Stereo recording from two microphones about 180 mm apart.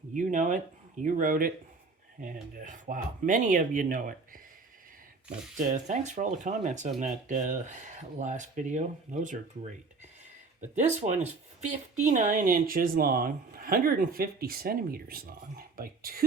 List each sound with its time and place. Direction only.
0.1 s speech: 45° right (ahead or behind)
5.5 s speech: 40° right (ahead or behind)
10.8 s speech: 40° right (ahead or behind); by 16.2 s 55° right (ahead or behind)